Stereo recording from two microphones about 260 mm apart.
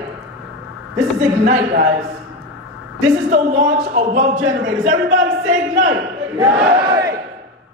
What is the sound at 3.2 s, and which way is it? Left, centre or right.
Speech, right.